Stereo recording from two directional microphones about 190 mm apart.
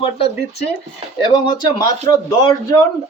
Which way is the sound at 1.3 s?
20° left (ahead or behind).